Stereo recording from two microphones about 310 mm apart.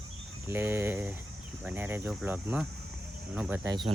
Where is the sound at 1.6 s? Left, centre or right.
Centre.